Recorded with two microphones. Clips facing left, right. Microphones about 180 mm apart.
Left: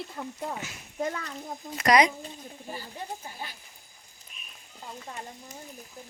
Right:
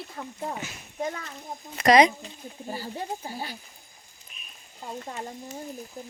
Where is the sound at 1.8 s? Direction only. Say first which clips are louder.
Right 4 dB; 25° right (ahead or behind).